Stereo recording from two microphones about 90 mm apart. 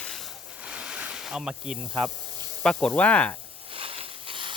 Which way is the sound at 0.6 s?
10° right (ahead or behind).